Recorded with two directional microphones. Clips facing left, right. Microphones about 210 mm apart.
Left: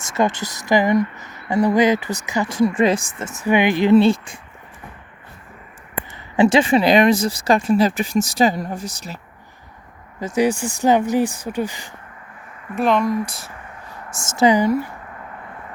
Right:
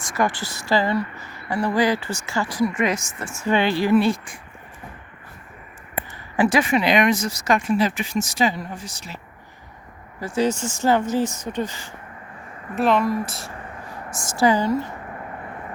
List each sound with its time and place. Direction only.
0.0 s a woman's voice: 25° left (ahead or behind)
6.3 s speech: 25° left (ahead or behind); by 9.1 s 40° left (ahead or behind)
10.2 s speech: 20° left (ahead or behind)
12.7 s speech: 5° right (ahead or behind)
14.2 s speech: 20° left (ahead or behind)